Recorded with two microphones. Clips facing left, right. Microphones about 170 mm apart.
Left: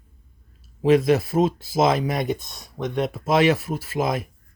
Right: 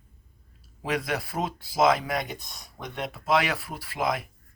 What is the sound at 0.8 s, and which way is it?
Speech, 25° left (ahead or behind).